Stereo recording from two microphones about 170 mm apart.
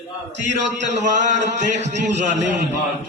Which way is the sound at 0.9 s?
45° right (ahead or behind).